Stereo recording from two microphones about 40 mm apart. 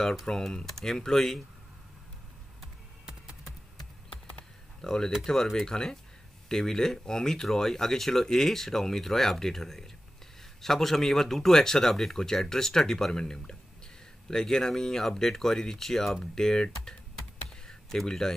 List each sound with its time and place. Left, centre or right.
0.3 s speech: centre
4.1 s computer keyboard: left
4.8 s speech: centre
17.6 s a sound: centre